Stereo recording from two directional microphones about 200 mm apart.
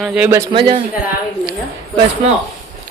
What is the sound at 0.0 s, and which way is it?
Speech, 5° right (ahead or behind).